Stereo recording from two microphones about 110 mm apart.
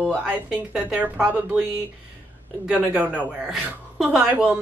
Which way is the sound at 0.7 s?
10° right (ahead or behind).